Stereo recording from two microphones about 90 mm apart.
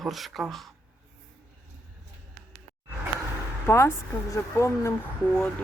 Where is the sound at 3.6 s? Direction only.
30° left (ahead or behind).